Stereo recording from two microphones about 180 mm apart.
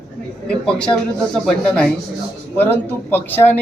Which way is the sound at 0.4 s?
5° left (ahead or behind).